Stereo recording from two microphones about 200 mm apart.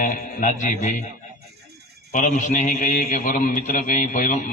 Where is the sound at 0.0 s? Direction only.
40° left (ahead or behind).